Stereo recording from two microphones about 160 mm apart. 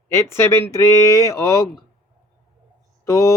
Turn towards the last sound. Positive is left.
turn(degrees=20)  # may be behind; listen again after turning